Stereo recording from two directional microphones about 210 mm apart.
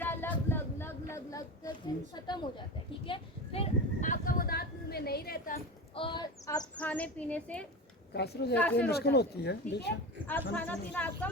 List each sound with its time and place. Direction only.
0.0 s child singing: 10° left (ahead or behind)
2.1 s a woman's voice: 20° left (ahead or behind)
3.1 s a sound: 30° left (ahead or behind); by 5.5 s 45° left (ahead or behind)
5.9 s speech: 25° left (ahead or behind)
6.7 s speech: 5° left (ahead or behind)
8.1 s speech: 50° left (ahead or behind)
10.2 s speech: 10° left (ahead or behind)